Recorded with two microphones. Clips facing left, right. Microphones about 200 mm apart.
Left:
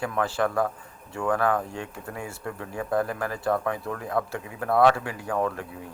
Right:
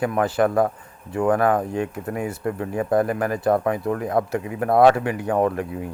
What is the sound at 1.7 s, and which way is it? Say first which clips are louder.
Speech: right 10 dB; 60° right (ahead or behind).